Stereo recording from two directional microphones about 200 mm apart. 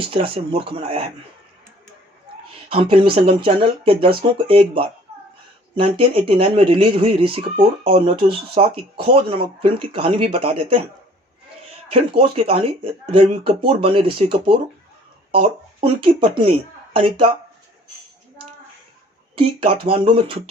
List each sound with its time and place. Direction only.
0.1 s speech: 30° right (ahead or behind)
2.6 s speech: 25° right (ahead or behind)
11.9 s speech: 25° right (ahead or behind)
19.4 s speech: 25° right (ahead or behind)